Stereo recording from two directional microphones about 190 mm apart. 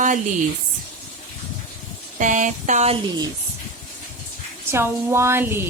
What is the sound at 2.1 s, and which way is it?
Speech, 40° right (ahead or behind).